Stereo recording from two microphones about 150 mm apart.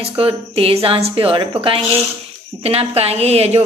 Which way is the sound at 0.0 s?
40° right (ahead or behind).